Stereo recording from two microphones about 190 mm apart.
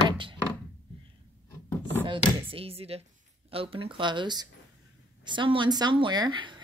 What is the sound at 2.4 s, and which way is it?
Speech, 30° right (ahead or behind).